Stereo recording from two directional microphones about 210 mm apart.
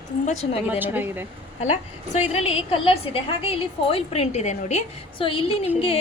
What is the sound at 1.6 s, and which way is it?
A woman's voice, 35° left (ahead or behind).